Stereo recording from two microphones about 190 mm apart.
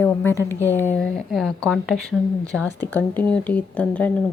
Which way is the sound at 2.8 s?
10° left (ahead or behind).